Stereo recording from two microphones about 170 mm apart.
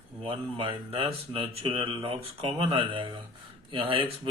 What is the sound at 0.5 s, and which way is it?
Speech, 30° right (ahead or behind).